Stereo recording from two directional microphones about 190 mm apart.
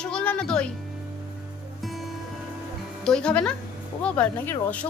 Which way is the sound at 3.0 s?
5° left (ahead or behind).